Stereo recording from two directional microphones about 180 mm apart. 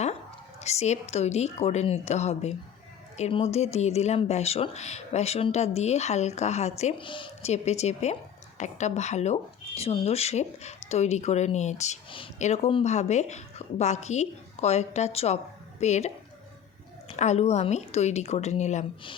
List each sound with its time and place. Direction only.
0.6 s speech: 35° left (ahead or behind)